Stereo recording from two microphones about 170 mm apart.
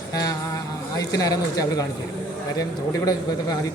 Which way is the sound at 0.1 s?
20° left (ahead or behind).